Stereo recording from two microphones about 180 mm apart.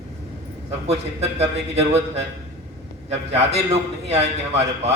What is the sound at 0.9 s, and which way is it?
A man's voice, 35° right (ahead or behind).